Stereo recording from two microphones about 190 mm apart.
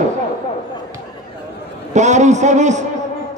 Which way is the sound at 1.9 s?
40° right (ahead or behind).